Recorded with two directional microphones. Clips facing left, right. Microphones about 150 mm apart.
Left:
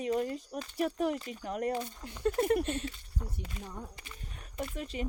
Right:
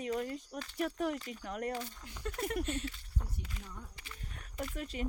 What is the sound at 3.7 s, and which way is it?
Speech, 45° left (ahead or behind).